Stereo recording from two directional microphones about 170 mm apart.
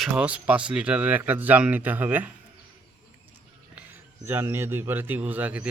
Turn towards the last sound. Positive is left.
turn(degrees=-10)  # may be behind; listen again after turning